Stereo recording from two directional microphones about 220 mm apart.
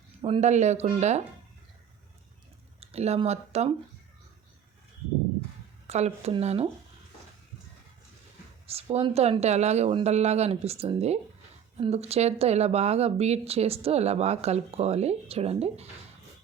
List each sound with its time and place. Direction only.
0.2 s speech: 30° right (ahead or behind)
2.8 s speech: 30° right (ahead or behind)
5.9 s speech: 30° right (ahead or behind)
8.6 s speech: 25° right (ahead or behind)